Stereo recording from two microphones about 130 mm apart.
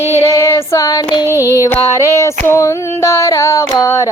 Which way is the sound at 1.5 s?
20° left (ahead or behind).